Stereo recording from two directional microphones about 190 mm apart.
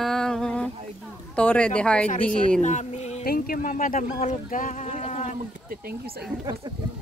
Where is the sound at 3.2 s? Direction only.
50° left (ahead or behind).